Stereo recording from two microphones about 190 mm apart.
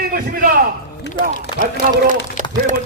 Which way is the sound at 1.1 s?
65° left (ahead or behind).